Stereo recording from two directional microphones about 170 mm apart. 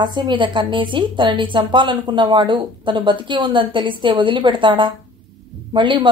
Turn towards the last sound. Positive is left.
turn(degrees=-25)  # may be behind; listen again after turning